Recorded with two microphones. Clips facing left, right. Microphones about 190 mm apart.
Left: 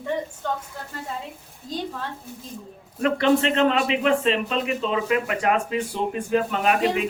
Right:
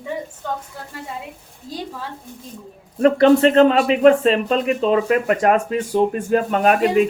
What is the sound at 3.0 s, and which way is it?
Speech, 40° right (ahead or behind).